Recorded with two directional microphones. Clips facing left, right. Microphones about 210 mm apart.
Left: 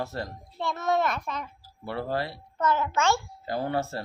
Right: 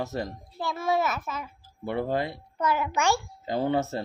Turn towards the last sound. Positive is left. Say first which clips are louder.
# right 3 dB
turn(degrees=-20)  # may be behind; listen again after turning